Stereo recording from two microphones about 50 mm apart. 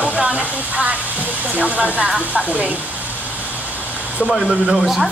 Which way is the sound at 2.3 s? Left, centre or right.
Left.